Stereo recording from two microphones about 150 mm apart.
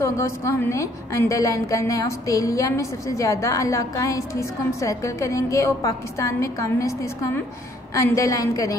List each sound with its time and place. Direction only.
0.0 s a woman's voice: 20° left (ahead or behind)